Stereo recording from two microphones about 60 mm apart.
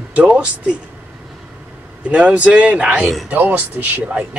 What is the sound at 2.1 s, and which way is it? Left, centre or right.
Speech, right.